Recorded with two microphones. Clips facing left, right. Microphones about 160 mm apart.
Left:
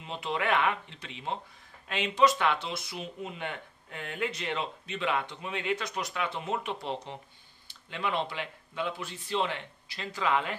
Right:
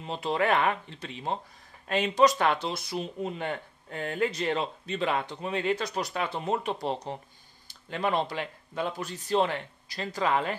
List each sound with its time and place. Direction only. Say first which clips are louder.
0.0 s speech: right 4 dB; 40° right (ahead or behind)